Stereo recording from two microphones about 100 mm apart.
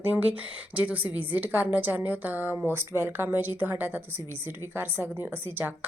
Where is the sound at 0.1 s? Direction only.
15° right (ahead or behind).